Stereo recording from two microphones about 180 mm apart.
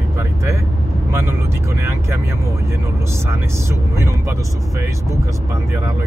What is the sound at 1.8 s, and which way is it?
Vehicle, 15° right (ahead or behind).